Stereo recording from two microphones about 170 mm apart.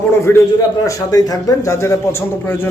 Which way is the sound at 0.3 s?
15° left (ahead or behind).